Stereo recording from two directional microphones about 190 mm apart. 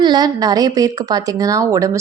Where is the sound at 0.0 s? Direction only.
20° right (ahead or behind).